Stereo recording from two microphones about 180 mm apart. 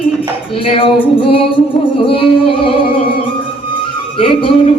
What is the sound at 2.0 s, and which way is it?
Music, 30° left (ahead or behind).